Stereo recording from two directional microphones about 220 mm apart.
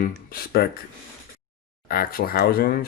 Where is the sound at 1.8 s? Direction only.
40° left (ahead or behind).